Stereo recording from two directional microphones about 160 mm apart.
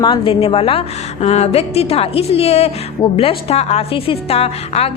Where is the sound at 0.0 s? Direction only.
30° left (ahead or behind).